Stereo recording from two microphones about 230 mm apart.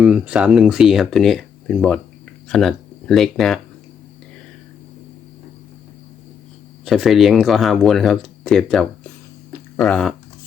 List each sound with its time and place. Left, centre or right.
0.0 s speech: centre
6.8 s speech: centre